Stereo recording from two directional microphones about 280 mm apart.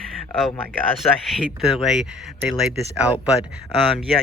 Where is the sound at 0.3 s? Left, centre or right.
Centre.